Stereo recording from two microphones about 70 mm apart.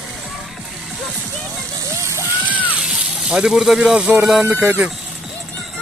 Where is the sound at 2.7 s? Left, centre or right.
Centre.